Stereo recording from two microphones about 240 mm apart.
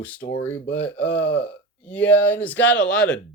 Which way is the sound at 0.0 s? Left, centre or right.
Centre.